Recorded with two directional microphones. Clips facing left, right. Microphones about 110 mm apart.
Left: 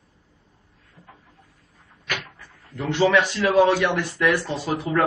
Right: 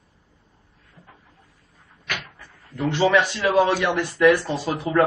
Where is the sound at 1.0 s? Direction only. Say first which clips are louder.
Left 1 dB; 15° left (ahead or behind).